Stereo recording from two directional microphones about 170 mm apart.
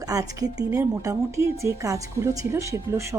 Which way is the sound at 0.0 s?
20° right (ahead or behind).